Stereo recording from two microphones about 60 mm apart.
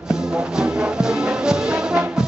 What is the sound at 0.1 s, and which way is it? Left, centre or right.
Music, centre.